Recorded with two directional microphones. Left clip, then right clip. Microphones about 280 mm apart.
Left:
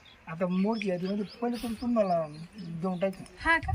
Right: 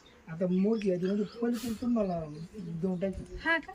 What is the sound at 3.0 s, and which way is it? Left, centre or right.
Speech, centre.